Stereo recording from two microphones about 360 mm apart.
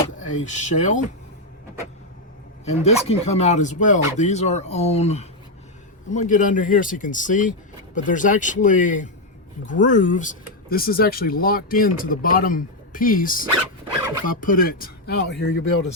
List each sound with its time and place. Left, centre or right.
0.3 s speech: centre
2.6 s speech: centre